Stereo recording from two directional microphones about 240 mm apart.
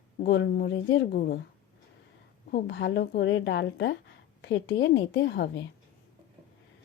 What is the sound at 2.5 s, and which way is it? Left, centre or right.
Speech, left.